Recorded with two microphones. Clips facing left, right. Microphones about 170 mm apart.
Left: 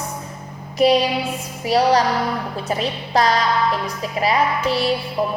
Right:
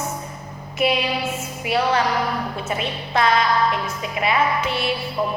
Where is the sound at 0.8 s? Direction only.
35° left (ahead or behind).